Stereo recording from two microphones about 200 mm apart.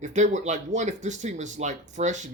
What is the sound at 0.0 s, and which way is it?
Speech, 35° right (ahead or behind).